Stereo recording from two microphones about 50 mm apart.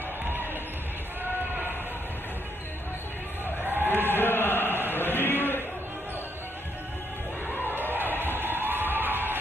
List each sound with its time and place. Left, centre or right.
3.6 s a sound: right
4.1 s chant: left
7.7 s crowd: right